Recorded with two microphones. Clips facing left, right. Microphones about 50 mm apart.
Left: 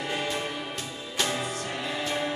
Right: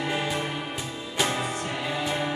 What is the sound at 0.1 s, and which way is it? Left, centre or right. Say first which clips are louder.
Music: even; centre.